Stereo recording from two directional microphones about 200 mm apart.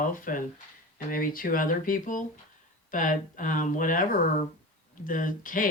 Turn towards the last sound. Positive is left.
turn(degrees=45)  # may be behind; listen again after turning